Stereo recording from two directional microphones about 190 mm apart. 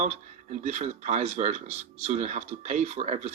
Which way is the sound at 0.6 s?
35° right (ahead or behind).